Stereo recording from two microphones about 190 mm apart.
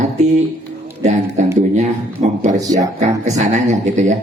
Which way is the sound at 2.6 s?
20° right (ahead or behind).